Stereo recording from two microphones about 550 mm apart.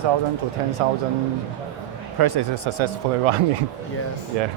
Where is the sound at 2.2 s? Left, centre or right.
Right.